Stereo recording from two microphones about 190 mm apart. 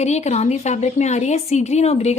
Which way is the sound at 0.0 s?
35° left (ahead or behind).